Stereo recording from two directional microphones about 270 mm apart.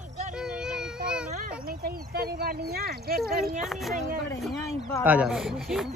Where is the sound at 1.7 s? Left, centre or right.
Right.